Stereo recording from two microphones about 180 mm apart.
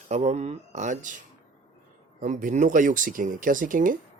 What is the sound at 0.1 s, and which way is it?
Speech, 40° right (ahead or behind).